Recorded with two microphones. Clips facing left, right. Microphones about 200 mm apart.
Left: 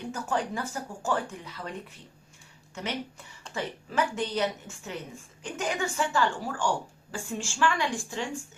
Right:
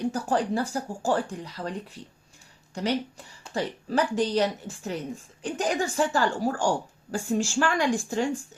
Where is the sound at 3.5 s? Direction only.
35° right (ahead or behind).